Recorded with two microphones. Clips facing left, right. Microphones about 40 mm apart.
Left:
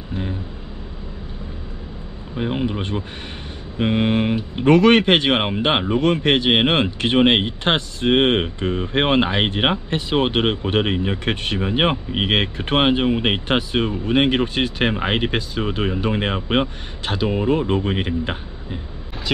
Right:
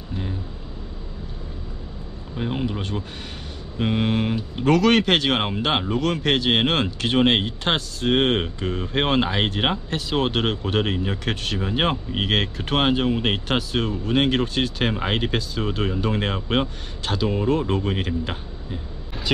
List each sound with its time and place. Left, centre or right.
0.1 s vehicle: left
2.3 s speech: left